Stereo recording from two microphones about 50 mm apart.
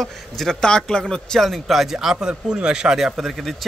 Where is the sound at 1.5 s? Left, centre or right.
Centre.